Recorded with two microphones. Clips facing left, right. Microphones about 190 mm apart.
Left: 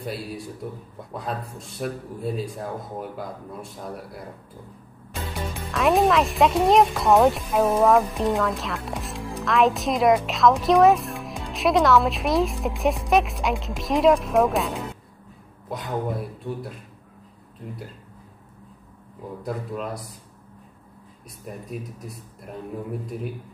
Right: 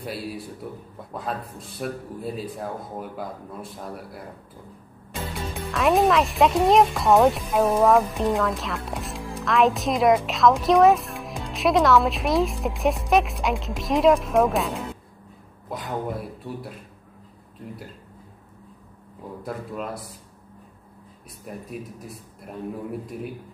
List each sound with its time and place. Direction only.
0.0 s speech: centre (ahead or behind)
5.1 s speech: centre (ahead or behind)
19.4 s speech: centre (ahead or behind)